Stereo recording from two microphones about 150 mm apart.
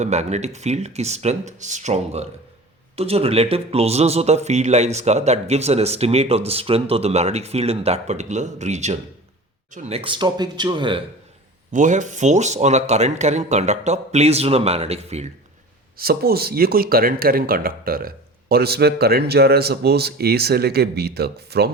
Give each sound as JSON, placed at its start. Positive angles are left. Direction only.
{"t": 0.0, "sound": "speech", "side_deg": -50}
{"t": 11.7, "sound": "speech", "side_deg": -55}
{"t": 16.0, "sound": "speech", "side_deg": -90}